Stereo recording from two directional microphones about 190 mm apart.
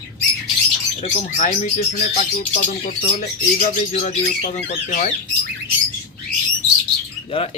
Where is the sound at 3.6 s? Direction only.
40° left (ahead or behind).